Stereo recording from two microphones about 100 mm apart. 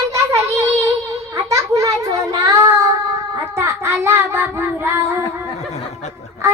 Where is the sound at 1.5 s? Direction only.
35° right (ahead or behind).